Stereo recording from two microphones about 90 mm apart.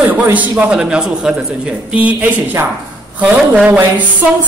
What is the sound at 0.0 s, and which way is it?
Speech, 20° right (ahead or behind).